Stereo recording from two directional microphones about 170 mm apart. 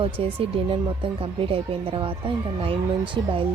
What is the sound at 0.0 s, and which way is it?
Speech, 35° right (ahead or behind).